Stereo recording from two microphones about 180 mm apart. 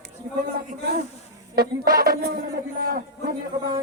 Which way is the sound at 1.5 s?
55° right (ahead or behind).